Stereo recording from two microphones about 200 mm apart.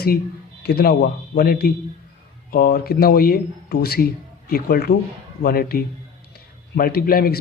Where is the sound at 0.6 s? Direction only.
50° left (ahead or behind).